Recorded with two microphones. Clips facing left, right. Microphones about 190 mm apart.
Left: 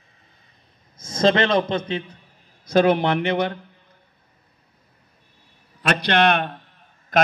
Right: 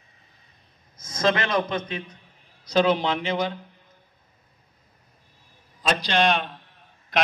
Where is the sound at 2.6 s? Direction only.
55° left (ahead or behind).